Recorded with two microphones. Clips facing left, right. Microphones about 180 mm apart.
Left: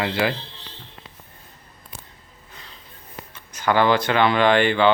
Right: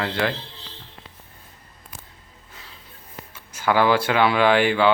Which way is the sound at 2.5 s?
5° right (ahead or behind).